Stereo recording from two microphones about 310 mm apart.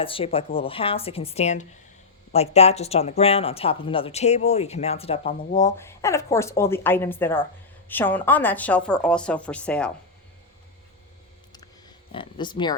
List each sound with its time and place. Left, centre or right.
0.0 s a woman's voice: centre
12.1 s a woman's voice: centre